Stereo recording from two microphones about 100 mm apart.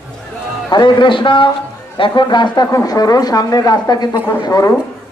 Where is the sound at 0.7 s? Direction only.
50° left (ahead or behind).